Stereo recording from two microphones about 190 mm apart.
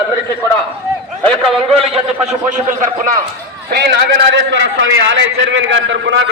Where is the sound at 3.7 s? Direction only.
60° right (ahead or behind).